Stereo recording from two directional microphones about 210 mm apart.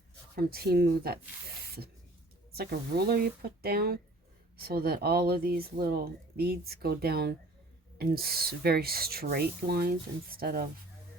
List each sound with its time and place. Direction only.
0.3 s speech: 45° right (ahead or behind)
2.5 s speech: 50° right (ahead or behind)